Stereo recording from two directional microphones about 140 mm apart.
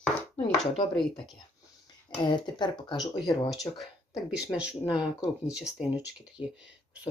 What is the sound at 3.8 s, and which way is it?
Speech, 5° right (ahead or behind).